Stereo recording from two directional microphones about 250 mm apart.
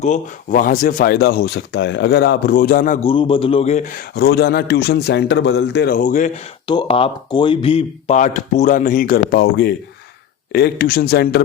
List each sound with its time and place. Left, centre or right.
0.0 s speech: left
6.7 s speech: centre; by 11.4 s left